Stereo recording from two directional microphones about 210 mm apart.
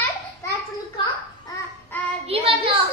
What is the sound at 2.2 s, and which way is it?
Child singing, 25° right (ahead or behind).